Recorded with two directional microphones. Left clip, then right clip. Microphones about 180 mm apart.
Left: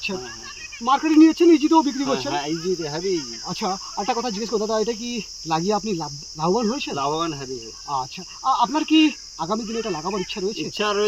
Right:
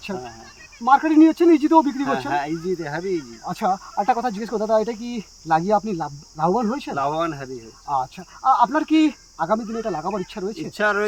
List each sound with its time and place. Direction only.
0.9 s speech: 5° right (ahead or behind)
2.0 s speech: 15° right (ahead or behind)
6.9 s speech: 20° right (ahead or behind)
8.4 s a man's voice: 5° right (ahead or behind)
10.8 s speech: 25° right (ahead or behind)